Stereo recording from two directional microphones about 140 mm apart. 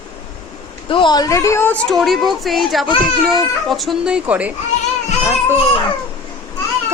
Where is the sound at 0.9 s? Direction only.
35° left (ahead or behind); by 4.5 s 10° right (ahead or behind).